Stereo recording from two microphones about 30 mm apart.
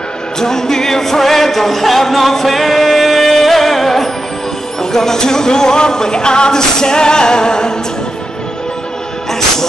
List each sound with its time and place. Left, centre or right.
0.4 s music: centre